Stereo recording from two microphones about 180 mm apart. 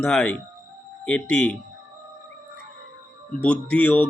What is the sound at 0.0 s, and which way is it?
Speech, 5° left (ahead or behind).